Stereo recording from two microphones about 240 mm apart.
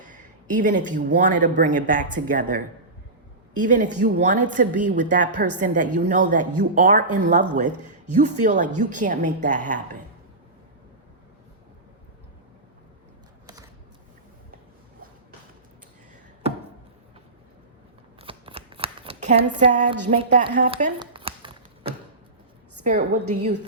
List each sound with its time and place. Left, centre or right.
0.0 s speech: right
18.2 s scissors: right
20.3 s speech: right
21.0 s tap: right
22.8 s a woman's voice: right